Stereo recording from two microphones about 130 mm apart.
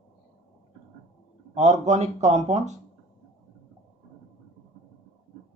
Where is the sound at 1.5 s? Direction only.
60° right (ahead or behind).